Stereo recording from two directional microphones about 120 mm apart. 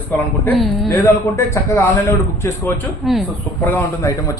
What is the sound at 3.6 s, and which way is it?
Speech, 20° left (ahead or behind).